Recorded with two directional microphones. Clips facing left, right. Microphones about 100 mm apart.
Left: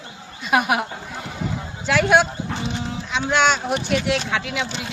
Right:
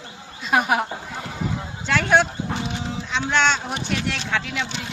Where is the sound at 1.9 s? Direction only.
10° left (ahead or behind).